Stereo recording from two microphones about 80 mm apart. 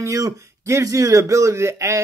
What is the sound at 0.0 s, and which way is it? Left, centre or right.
Speech, right.